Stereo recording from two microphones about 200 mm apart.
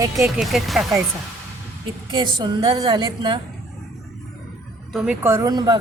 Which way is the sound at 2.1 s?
25° right (ahead or behind).